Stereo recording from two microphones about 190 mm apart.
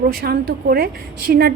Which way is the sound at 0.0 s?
50° right (ahead or behind).